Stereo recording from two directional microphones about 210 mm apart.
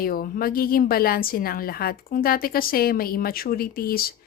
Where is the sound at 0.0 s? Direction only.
45° left (ahead or behind).